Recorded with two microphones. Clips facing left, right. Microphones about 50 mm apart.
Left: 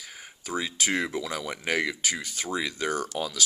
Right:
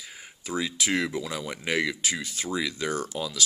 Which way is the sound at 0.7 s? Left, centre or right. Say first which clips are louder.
Even; left.